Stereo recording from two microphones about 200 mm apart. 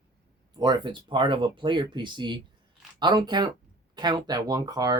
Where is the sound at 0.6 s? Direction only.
20° right (ahead or behind).